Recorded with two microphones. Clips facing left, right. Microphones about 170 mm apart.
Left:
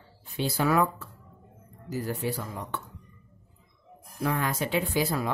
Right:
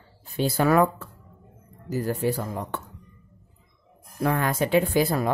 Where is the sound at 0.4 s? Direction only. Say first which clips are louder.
Right 5 dB; 55° right (ahead or behind).